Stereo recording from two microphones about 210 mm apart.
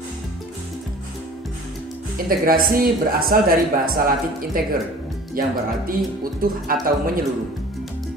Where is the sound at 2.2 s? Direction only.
45° right (ahead or behind).